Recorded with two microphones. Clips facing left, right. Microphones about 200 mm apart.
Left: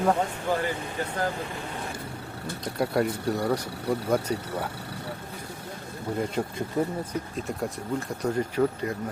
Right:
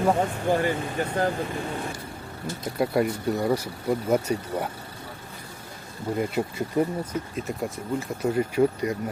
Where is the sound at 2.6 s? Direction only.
Centre (ahead or behind).